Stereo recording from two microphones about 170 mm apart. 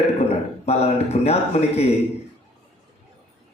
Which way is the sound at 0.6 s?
40° left (ahead or behind).